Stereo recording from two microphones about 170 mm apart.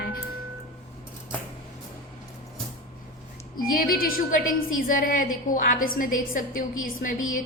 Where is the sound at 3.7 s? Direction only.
60° left (ahead or behind).